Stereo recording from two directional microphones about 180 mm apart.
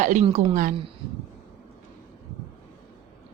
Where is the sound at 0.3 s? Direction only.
30° right (ahead or behind).